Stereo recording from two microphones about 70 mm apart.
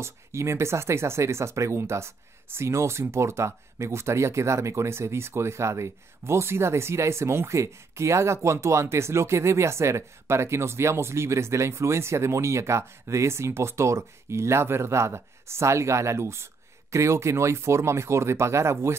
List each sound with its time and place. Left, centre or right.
0.0 s speech: right